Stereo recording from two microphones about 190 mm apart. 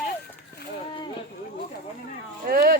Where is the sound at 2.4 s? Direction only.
55° right (ahead or behind).